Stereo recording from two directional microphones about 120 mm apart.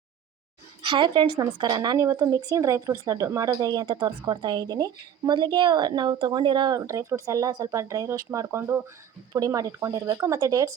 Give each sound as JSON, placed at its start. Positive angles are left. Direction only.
{"t": 0.8, "sound": "a woman's voice", "side_deg": -40}